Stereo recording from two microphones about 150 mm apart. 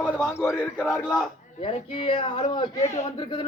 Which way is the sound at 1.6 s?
35° left (ahead or behind).